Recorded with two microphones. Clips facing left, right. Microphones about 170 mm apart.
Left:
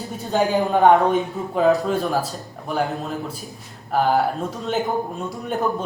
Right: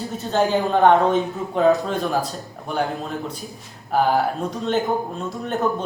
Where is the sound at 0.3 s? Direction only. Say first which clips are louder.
Even; 10° left (ahead or behind).